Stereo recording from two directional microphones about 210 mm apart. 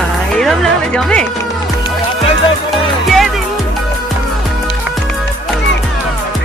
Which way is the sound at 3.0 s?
Centre (ahead or behind).